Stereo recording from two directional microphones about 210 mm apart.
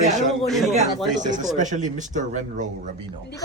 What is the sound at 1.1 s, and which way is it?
Speech, 35° right (ahead or behind).